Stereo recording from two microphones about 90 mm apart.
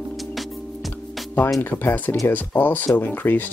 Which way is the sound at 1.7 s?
20° left (ahead or behind).